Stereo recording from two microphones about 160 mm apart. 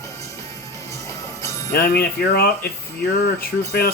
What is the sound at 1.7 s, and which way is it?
Speech, 80° left.